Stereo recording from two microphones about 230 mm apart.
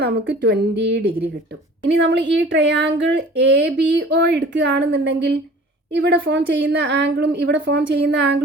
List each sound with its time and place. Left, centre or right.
0.0 s speech: right